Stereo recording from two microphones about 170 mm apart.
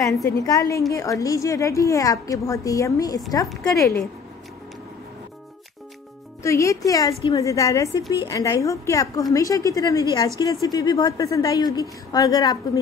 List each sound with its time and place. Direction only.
0.0 s a woman's voice: 20° left (ahead or behind)
6.4 s a woman's voice: 15° left (ahead or behind)